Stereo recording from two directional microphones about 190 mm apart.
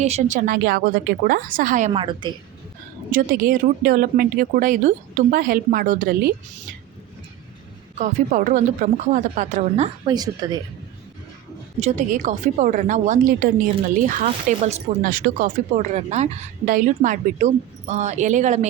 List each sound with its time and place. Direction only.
0.0 s speech: 35° right (ahead or behind)
1.9 s speech: 25° right (ahead or behind)
3.1 s speech: 45° right (ahead or behind)
7.9 s speech: 45° right (ahead or behind)
10.1 s speech: 20° right (ahead or behind)
11.8 s speech: 35° right (ahead or behind)